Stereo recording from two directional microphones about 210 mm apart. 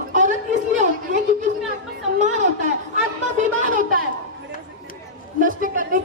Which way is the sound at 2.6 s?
35° right (ahead or behind).